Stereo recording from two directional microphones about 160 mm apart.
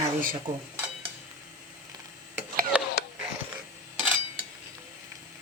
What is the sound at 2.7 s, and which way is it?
Wheeze, 5° right (ahead or behind).